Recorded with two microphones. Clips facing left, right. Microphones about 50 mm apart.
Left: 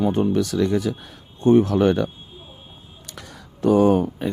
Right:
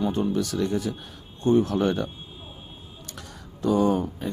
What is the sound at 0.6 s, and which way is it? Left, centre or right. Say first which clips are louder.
Speech: left 5 dB; left.